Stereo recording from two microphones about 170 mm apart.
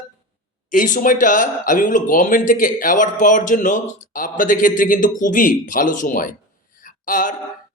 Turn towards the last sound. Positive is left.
turn(degrees=50)  # may be behind; listen again after turning